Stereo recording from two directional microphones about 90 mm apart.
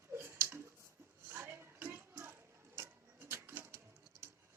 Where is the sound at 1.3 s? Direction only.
25° right (ahead or behind).